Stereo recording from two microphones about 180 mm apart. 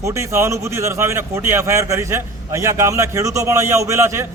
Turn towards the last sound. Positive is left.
turn(degrees=-15)  # may be behind; listen again after turning